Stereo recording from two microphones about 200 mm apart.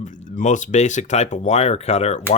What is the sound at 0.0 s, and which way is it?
Speech, 35° left (ahead or behind).